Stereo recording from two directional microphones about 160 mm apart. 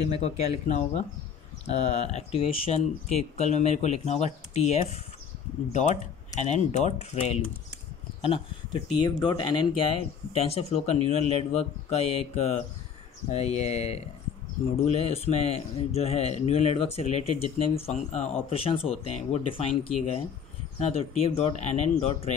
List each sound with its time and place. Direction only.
0.2 s speech: 50° left (ahead or behind)
1.9 s a man's voice: 40° left (ahead or behind)